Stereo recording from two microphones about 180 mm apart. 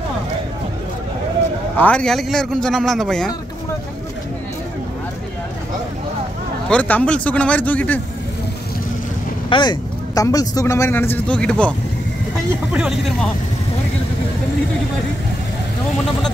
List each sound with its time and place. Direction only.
1.8 s a man's voice: 5° left (ahead or behind)
6.7 s a man's voice: 10° left (ahead or behind)
9.5 s a man's voice: 25° left (ahead or behind); by 11.7 s 5° left (ahead or behind)
12.7 s a man's voice: centre (ahead or behind)